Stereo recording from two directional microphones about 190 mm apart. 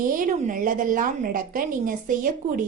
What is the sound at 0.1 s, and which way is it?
A woman's voice, 45° right (ahead or behind).